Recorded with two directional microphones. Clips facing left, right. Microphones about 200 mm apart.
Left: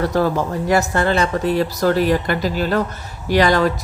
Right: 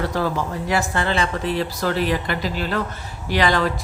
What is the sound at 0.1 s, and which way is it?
A woman's voice, 45° left (ahead or behind).